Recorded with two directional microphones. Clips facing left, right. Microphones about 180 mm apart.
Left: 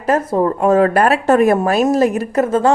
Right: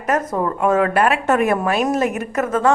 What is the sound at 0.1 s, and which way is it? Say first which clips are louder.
A woman's voice: left 5 dB; 30° left (ahead or behind).